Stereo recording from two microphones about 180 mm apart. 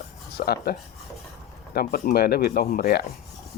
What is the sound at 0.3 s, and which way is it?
Speech, 60° left (ahead or behind).